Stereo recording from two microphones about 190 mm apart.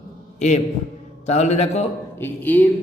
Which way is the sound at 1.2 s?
35° left (ahead or behind).